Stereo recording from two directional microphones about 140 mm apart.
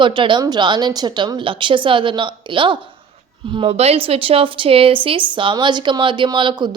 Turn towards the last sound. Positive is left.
turn(degrees=-35)  # may be behind; listen again after turning